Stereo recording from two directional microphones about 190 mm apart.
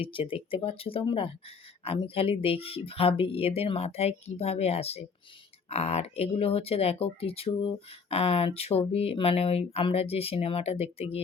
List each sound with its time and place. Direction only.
0.0 s speech: 25° left (ahead or behind)